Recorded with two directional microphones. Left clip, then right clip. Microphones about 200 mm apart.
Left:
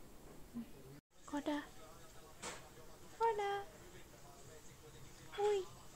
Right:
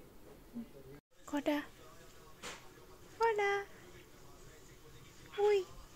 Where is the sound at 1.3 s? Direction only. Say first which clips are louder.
Right 6 dB; 20° right (ahead or behind).